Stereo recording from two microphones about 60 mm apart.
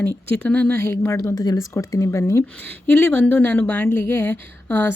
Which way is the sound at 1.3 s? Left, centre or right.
Left.